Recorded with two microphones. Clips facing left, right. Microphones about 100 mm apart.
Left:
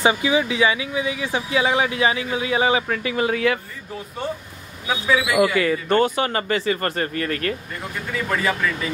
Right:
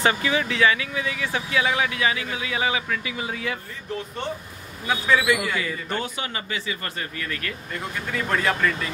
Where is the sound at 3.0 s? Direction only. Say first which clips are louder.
Left 9 dB; 60° left (ahead or behind).